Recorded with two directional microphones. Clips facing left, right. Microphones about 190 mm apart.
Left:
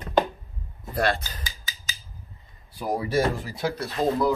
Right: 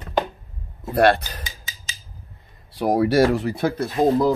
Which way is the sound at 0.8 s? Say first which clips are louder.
Right 8 dB; 65° right (ahead or behind).